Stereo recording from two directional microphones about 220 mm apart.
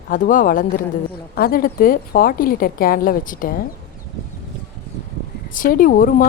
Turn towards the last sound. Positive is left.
turn(degrees=40)  # may be behind; listen again after turning